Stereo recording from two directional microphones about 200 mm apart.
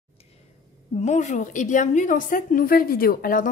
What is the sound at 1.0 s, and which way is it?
A woman's voice, 35° left (ahead or behind).